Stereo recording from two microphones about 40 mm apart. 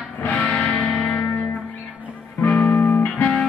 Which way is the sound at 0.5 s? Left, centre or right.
Left.